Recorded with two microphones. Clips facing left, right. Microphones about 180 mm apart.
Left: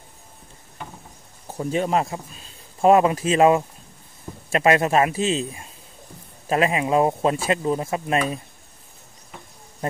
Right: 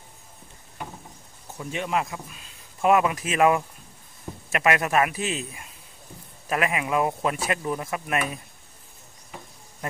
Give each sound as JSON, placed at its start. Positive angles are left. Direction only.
{"t": 1.5, "sound": "speech", "side_deg": 35}